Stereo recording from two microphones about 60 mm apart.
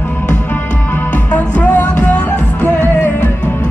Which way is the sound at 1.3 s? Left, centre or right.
Left.